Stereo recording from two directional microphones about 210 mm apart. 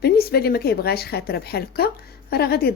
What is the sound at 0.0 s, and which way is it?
A woman's voice, 50° left (ahead or behind).